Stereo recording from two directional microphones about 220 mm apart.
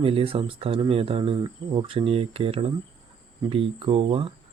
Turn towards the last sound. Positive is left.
turn(degrees=-25)  # may be behind; listen again after turning